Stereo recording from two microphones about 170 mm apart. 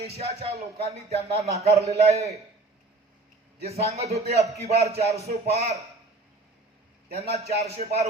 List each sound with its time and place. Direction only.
0.0 s a man's voice: 35° right (ahead or behind)
3.6 s a man's voice: 35° right (ahead or behind)
7.2 s a man's voice: 40° right (ahead or behind)